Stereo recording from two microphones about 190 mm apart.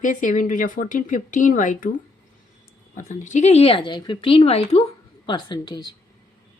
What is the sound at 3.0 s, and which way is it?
A woman's voice, 40° left (ahead or behind).